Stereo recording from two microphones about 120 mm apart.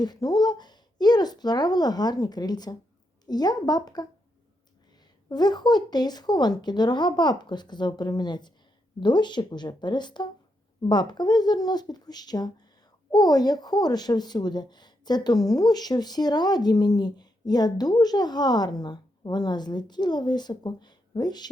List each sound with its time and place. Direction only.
0.0 s speech: 35° left (ahead or behind)
5.3 s speech: 35° left (ahead or behind)